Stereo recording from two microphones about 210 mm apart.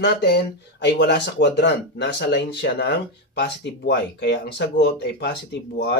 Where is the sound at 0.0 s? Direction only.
50° left (ahead or behind).